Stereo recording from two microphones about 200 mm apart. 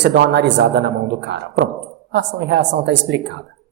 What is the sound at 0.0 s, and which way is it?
A woman's voice, 60° right (ahead or behind).